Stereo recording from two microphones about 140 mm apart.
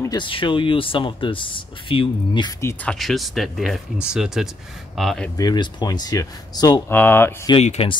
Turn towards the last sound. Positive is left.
turn(degrees=50)  # may be behind; listen again after turning